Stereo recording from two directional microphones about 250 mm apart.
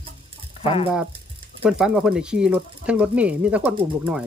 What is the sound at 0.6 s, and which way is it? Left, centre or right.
Speech, left.